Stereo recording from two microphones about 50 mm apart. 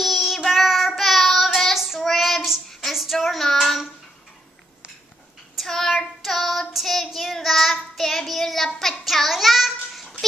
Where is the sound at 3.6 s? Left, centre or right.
Centre.